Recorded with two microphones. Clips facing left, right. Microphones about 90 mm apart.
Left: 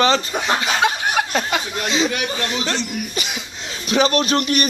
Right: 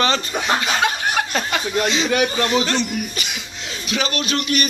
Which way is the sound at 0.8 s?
15° left (ahead or behind).